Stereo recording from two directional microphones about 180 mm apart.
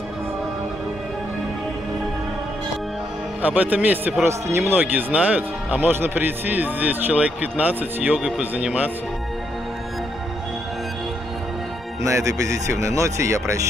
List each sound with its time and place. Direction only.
3.4 s a man's voice: 10° right (ahead or behind)
12.0 s a man's voice: 15° right (ahead or behind)